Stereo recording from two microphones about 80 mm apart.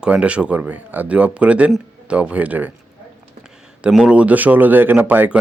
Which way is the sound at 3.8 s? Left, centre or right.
Centre.